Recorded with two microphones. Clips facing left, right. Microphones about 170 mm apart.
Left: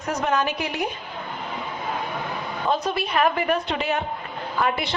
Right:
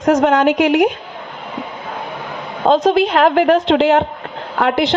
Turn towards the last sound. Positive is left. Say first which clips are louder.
# right 9 dB
turn(degrees=-90)